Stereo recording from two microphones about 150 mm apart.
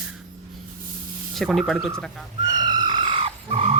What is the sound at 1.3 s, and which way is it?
Speech, centre (ahead or behind).